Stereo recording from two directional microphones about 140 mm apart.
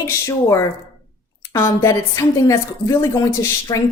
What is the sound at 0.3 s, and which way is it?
Speech, 20° left (ahead or behind).